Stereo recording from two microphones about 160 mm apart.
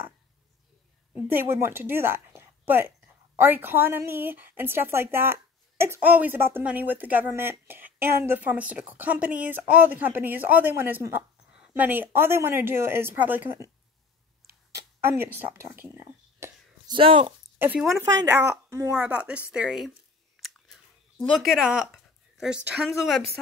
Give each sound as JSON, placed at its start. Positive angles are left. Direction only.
{"t": 1.1, "sound": "a woman's voice", "side_deg": -15}
{"t": 15.0, "sound": "speech", "side_deg": -15}
{"t": 16.9, "sound": "speech", "side_deg": -30}
{"t": 17.6, "sound": "speech", "side_deg": -10}
{"t": 20.4, "sound": "chewing", "side_deg": 0}